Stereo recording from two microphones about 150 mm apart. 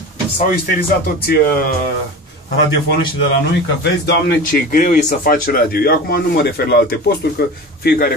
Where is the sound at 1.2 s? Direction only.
80° left.